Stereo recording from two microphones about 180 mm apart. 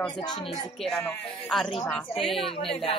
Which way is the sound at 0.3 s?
30° left (ahead or behind).